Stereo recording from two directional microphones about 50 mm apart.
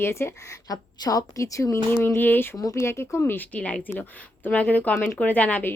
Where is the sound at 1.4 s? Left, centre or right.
Left.